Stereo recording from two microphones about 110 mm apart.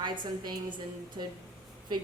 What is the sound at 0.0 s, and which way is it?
A woman's voice, 45° right (ahead or behind).